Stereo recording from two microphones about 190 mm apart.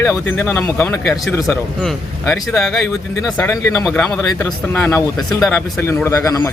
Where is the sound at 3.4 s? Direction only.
15° left (ahead or behind).